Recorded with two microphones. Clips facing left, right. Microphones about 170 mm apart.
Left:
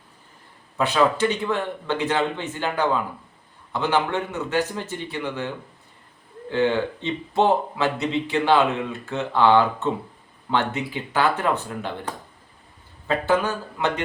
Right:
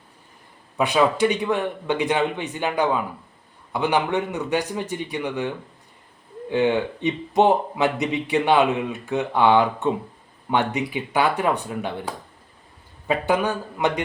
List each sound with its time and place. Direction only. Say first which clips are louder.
0.8 s a man's voice: right 1 dB; 15° right (ahead or behind)
6.5 s a man's voice: right 1 dB; 15° right (ahead or behind)